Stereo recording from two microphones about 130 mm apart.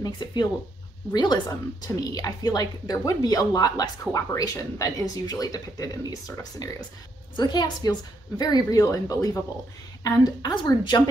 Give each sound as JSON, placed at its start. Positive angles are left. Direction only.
{"t": 0.0, "sound": "a woman's voice", "side_deg": 35}